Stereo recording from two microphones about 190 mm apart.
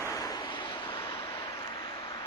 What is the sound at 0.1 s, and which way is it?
Vehicle, 20° left (ahead or behind).